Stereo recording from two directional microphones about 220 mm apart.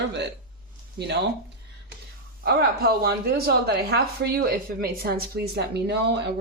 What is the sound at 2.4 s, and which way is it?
Speech, 45° right (ahead or behind).